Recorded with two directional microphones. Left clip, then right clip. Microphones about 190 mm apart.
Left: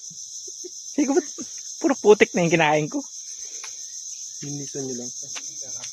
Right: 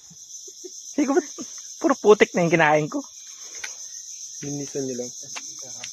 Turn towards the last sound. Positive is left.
turn(degrees=30)  # may be behind; listen again after turning